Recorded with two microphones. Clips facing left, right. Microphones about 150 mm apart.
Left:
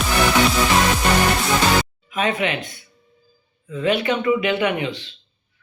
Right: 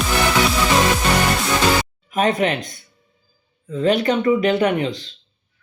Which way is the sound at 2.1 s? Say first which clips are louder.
Right 4 dB; 40° right (ahead or behind).